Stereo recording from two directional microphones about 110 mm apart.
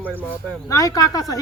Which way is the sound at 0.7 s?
30° left (ahead or behind).